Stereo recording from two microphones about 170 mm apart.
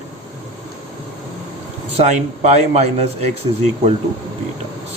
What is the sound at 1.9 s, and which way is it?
Speech, 45° right (ahead or behind).